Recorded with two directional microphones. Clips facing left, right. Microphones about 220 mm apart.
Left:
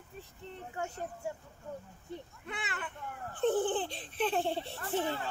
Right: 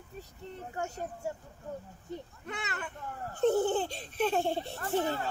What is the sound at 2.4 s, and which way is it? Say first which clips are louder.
A child's voice: even; 40° right (ahead or behind).